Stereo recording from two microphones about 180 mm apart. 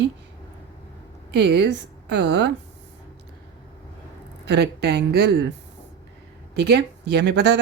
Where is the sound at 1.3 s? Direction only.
70° right (ahead or behind).